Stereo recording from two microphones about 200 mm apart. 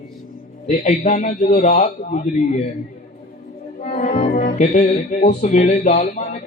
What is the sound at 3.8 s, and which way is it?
Music, 35° left (ahead or behind).